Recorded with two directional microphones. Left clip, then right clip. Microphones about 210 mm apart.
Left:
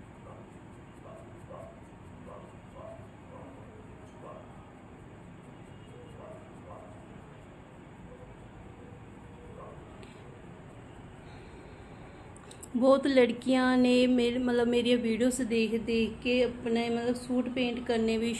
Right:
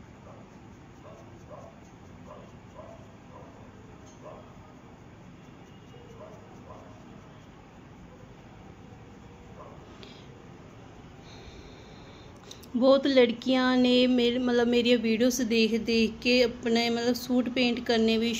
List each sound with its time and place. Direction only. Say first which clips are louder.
12.7 s speech: right 2 dB; 10° right (ahead or behind); by 18.3 s 25° right (ahead or behind)